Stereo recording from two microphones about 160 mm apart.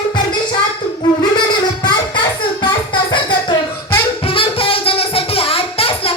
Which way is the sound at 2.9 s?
30° left (ahead or behind).